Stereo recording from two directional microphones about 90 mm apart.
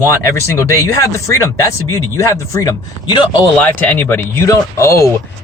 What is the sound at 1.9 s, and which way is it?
Speech, 35° left (ahead or behind).